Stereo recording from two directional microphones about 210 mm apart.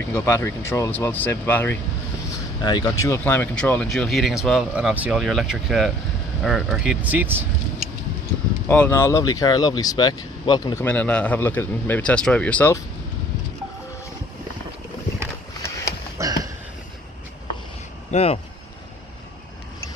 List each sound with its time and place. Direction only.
0.1 s speech: 10° left (ahead or behind); by 7.4 s 10° right (ahead or behind)
8.6 s speech: 10° left (ahead or behind)
16.2 s a sound: 15° right (ahead or behind)
18.1 s speech: 30° left (ahead or behind)